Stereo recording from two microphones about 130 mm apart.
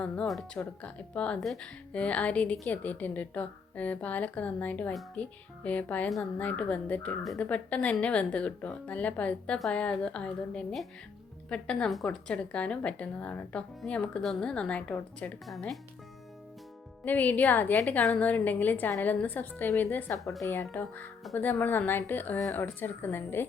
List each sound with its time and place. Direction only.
0.0 s a woman's voice: 5° left (ahead or behind)
15.4 s speech: centre (ahead or behind)
17.1 s a woman's voice: 10° left (ahead or behind)